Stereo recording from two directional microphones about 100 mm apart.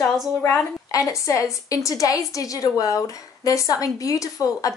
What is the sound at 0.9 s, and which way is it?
A woman's voice, 35° left (ahead or behind).